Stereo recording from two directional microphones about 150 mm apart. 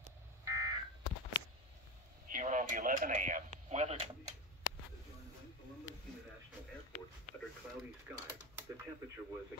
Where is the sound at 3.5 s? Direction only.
45° right (ahead or behind).